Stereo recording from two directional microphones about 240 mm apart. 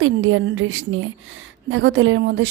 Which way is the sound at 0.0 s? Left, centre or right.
Right.